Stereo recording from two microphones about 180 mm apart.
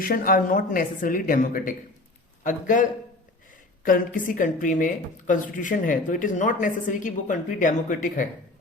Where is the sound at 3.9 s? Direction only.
50° left (ahead or behind).